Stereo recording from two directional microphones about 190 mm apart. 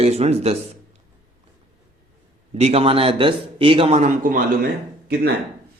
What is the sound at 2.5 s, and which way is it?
A man's voice, 30° right (ahead or behind).